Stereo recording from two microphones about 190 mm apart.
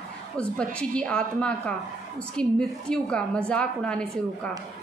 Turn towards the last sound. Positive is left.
turn(degrees=5)  # may be behind; listen again after turning